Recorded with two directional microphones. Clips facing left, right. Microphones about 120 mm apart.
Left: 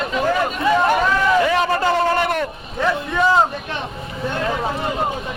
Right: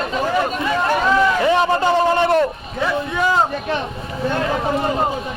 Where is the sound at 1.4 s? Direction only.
20° right (ahead or behind).